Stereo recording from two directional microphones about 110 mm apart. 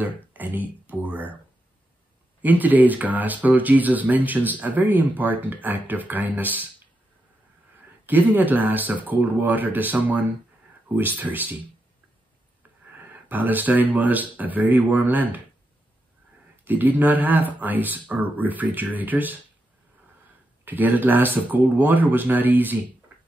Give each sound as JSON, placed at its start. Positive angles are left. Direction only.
{"t": 0.3, "sound": "a sound", "side_deg": -15}
{"t": 2.4, "sound": "speech", "side_deg": -15}
{"t": 8.1, "sound": "speech", "side_deg": -15}
{"t": 12.9, "sound": "speech", "side_deg": -15}
{"t": 16.6, "sound": "speech", "side_deg": -15}
{"t": 20.6, "sound": "speech", "side_deg": -15}